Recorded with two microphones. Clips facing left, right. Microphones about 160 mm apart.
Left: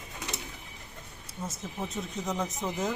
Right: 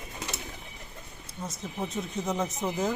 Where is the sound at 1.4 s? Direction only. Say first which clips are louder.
Right 2 dB; 5° left (ahead or behind).